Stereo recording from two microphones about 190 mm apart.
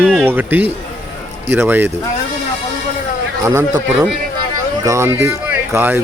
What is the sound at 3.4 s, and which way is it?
Speech, 15° right (ahead or behind).